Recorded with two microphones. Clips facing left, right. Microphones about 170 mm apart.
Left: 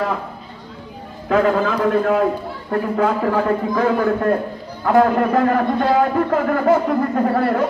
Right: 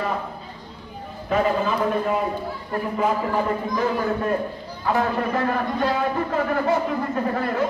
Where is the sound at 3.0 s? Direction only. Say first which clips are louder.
Left 4 dB; 70° left (ahead or behind).